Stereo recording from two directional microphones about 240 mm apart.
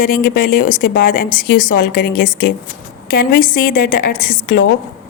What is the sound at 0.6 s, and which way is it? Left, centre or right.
Speech, left.